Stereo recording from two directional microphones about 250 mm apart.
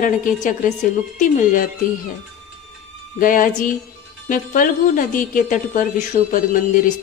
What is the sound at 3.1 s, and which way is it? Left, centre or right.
Speech, left.